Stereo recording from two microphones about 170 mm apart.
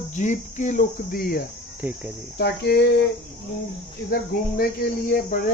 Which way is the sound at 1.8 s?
10° right (ahead or behind).